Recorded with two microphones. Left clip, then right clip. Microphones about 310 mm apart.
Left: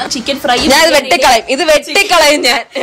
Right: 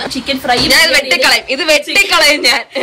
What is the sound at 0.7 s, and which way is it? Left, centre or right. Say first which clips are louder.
A woman's voice: left 2 dB; centre.